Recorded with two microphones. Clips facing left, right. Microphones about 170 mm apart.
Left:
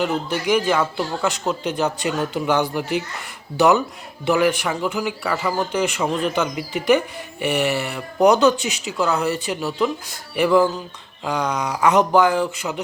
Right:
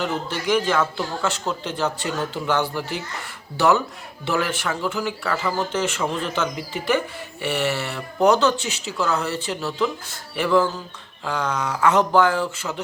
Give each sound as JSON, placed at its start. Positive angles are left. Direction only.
{"t": 0.0, "sound": "speech", "side_deg": 15}